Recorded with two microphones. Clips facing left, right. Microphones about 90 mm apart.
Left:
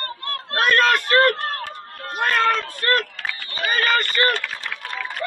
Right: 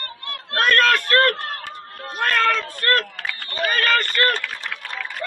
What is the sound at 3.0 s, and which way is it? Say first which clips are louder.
Run: even; 45° right (ahead or behind).